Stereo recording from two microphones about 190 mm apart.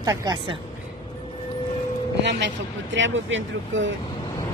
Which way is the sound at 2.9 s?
75° right (ahead or behind).